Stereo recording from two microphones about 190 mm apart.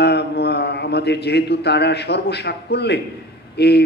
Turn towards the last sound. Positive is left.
turn(degrees=60)  # may be behind; listen again after turning